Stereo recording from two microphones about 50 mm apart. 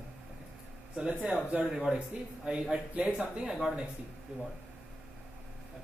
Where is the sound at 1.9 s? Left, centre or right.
Right.